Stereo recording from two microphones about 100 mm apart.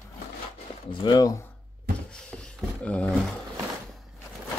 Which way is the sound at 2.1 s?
10° left (ahead or behind).